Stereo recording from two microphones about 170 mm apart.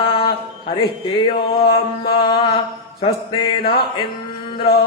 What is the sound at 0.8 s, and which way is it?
Mantra, 30° left (ahead or behind).